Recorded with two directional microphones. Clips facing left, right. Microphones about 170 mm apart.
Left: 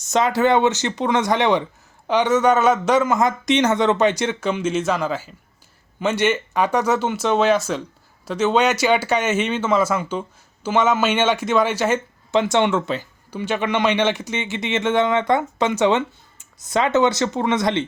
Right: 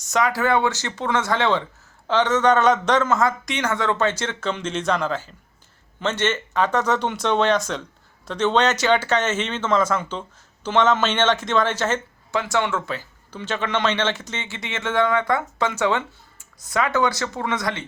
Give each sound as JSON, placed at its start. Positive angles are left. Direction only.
{"t": 0.0, "sound": "speech", "side_deg": 25}
{"t": 12.3, "sound": "speech", "side_deg": 25}